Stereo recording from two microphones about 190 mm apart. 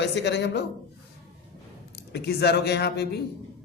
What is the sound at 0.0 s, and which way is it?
Speech, 65° left (ahead or behind).